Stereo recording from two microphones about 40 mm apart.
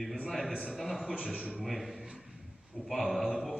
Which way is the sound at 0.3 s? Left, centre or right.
Centre.